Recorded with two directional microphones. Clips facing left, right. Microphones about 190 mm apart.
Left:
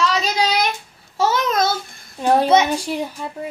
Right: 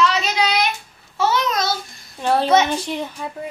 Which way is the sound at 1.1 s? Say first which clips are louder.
Left 1 dB; 50° left (ahead or behind).